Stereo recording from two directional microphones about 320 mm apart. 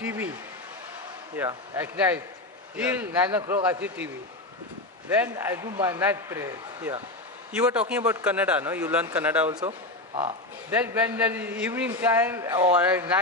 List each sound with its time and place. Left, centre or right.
0.0 s speech: centre
1.3 s a man's voice: centre
5.1 s a man's voice: centre
9.7 s a sound: centre
10.7 s a man's voice: centre